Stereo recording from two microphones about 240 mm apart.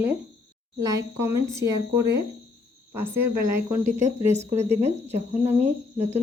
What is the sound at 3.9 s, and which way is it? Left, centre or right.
Speech, right.